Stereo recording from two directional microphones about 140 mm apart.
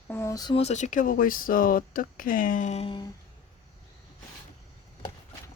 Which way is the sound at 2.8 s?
35° left (ahead or behind).